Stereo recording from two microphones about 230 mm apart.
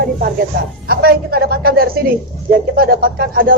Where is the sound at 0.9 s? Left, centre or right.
Right.